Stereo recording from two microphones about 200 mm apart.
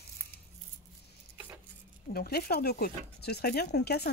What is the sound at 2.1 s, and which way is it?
Speech, 50° left (ahead or behind).